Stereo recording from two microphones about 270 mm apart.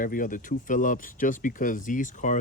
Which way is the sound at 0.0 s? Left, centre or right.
Left.